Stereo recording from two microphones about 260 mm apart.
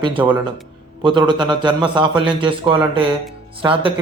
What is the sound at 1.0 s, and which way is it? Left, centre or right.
A man's voice, centre.